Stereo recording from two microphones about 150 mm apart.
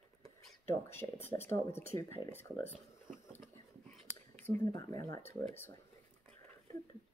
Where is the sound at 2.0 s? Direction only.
40° right (ahead or behind).